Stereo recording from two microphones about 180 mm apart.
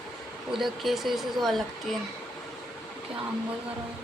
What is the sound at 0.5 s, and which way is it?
Speech, centre (ahead or behind).